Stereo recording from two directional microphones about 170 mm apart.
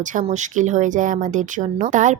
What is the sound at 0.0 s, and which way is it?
Speech, 50° right (ahead or behind).